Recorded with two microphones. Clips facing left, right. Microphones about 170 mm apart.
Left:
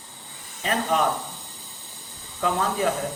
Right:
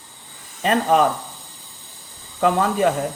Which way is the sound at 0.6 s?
65° right (ahead or behind).